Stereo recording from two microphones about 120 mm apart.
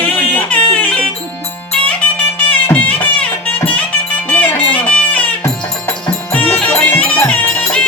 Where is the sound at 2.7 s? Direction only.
15° left (ahead or behind).